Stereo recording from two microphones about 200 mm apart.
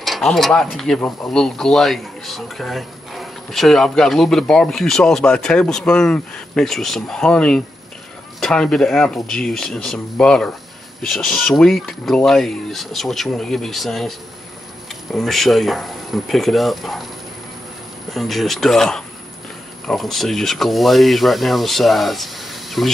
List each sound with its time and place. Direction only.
0.0 s speech: centre (ahead or behind)
15.1 s speech: centre (ahead or behind)
18.1 s speech: centre (ahead or behind)